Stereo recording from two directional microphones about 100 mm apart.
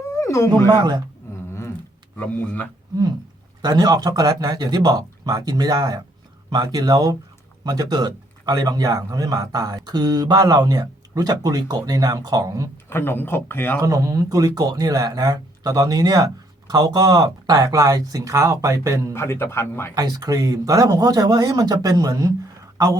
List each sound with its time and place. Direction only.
0.2 s speech: 30° left (ahead or behind)
0.7 s a man's voice: 45° right (ahead or behind)
2.1 s speech: 15° left (ahead or behind)
3.6 s speech: 40° right (ahead or behind)
12.7 s speech: 25° left (ahead or behind)
13.8 s speech: 35° right (ahead or behind)
19.1 s speech: 25° left (ahead or behind)
19.9 s speech: 40° right (ahead or behind)